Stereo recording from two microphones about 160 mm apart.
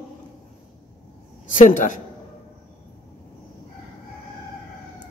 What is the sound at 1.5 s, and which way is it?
Speech, 55° left (ahead or behind).